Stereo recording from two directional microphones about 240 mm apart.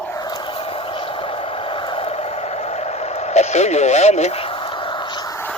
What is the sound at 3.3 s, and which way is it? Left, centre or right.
Speech, left.